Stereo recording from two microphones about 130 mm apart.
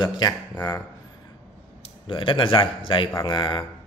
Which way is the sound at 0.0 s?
30° left (ahead or behind).